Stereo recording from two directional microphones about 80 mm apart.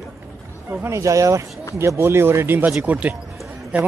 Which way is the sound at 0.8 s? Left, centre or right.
Right.